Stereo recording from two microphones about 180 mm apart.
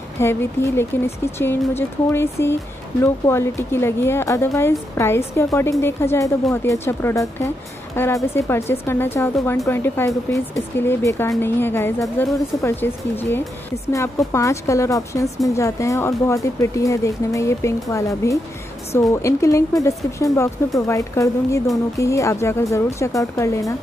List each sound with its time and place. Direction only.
0.2 s a woman's voice: 15° left (ahead or behind)